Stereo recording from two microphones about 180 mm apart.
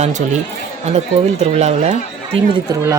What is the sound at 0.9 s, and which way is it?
Speech, 35° right (ahead or behind).